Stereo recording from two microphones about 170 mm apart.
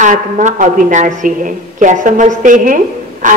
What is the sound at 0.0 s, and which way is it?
A woman's voice, 45° right (ahead or behind).